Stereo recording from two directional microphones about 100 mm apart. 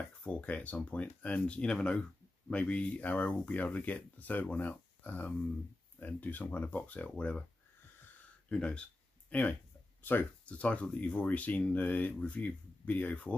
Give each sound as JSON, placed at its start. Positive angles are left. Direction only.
{"t": 0.2, "sound": "speech", "side_deg": 10}
{"t": 8.5, "sound": "speech", "side_deg": 10}